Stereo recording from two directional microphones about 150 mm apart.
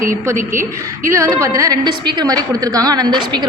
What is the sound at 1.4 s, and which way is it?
A woman's voice, 20° right (ahead or behind).